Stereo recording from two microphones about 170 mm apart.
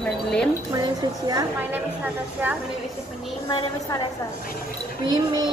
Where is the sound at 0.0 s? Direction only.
5° left (ahead or behind).